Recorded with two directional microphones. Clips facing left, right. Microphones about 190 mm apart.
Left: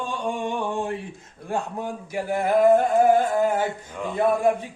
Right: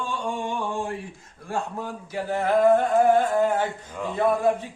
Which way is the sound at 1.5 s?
15° left (ahead or behind).